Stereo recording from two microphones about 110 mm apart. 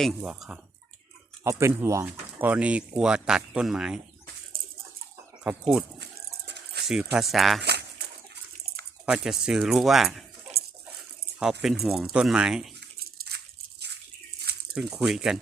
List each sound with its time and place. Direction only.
0.2 s speech: 5° right (ahead or behind)
1.5 s speech: 25° right (ahead or behind)
2.5 s speech: 10° right (ahead or behind)
5.4 s speech: 10° right (ahead or behind)
6.8 s speech: 5° right (ahead or behind)
9.0 s speech: 5° right (ahead or behind)
14.7 s speech: 5° right (ahead or behind)